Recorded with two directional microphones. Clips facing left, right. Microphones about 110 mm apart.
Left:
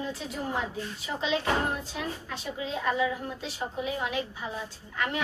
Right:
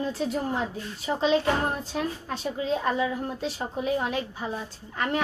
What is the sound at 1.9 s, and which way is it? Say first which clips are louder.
A woman's voice: right 5 dB; 35° right (ahead or behind).